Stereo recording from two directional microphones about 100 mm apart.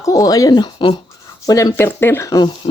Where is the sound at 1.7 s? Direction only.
25° left (ahead or behind).